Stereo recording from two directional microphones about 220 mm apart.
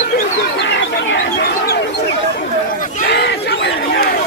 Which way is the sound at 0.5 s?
55° left (ahead or behind).